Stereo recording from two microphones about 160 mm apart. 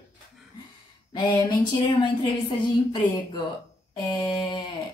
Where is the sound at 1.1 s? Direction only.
25° left (ahead or behind).